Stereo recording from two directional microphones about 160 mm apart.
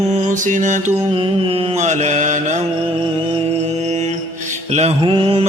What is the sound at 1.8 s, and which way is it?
Mantra, 50° right (ahead or behind).